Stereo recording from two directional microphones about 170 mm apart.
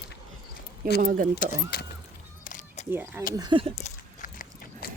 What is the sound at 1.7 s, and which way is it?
Keys jangling, 60° left (ahead or behind).